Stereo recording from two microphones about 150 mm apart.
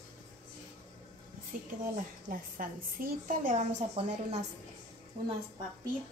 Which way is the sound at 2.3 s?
70° right (ahead or behind).